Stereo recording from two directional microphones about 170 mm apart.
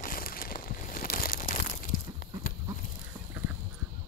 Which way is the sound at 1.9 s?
60° left (ahead or behind).